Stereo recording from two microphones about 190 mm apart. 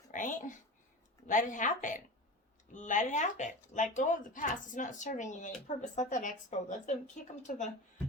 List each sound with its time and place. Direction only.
0.1 s a woman's voice: 45° left (ahead or behind)